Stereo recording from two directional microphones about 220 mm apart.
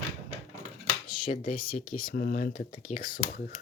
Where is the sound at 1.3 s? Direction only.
40° left (ahead or behind).